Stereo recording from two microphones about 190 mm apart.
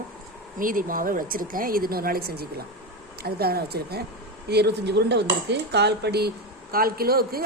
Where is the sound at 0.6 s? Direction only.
45° right (ahead or behind).